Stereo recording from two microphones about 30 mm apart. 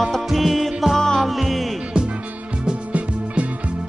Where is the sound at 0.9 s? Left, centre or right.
Centre.